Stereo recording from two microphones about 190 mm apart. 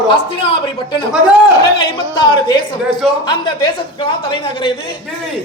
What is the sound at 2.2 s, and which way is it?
A woman's voice, 25° left (ahead or behind).